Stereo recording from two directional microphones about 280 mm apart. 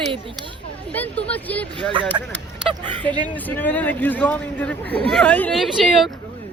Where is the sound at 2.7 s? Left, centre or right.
Centre.